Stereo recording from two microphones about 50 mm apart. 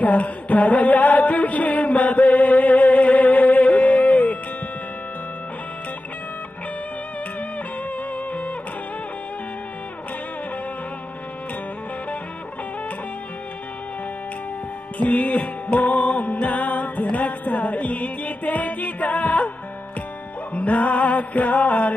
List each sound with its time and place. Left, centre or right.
0.0 s music: left
8.3 s music: left
15.0 s music: left
20.5 s music: left